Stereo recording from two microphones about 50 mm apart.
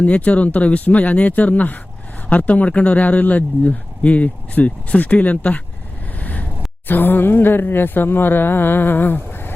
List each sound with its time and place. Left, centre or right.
0.0 s speech: left
6.1 s vehicle: left
6.8 s speech: left